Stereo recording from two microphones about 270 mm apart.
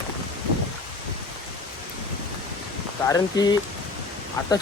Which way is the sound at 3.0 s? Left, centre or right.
Centre.